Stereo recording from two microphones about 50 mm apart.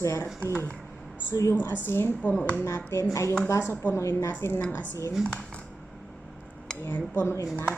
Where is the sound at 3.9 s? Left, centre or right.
Left.